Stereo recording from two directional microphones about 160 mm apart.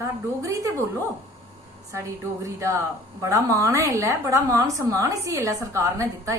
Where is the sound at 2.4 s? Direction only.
20° right (ahead or behind).